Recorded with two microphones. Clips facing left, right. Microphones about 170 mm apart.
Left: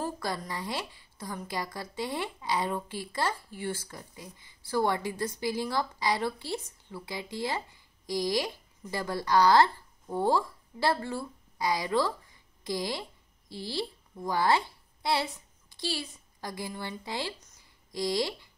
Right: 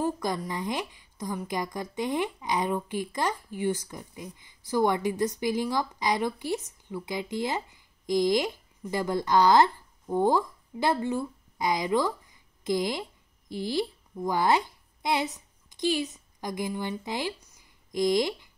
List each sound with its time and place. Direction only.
0.0 s a woman's voice: 15° right (ahead or behind)